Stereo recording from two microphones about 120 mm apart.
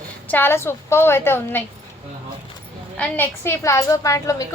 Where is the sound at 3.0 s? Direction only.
15° left (ahead or behind).